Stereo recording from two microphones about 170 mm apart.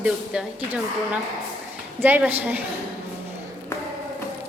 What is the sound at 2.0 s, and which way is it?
Speech, 10° right (ahead or behind).